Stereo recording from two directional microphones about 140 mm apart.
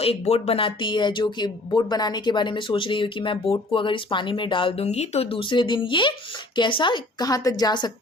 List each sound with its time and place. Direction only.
0.0 s speech: 45° left (ahead or behind); by 7.9 s 30° left (ahead or behind)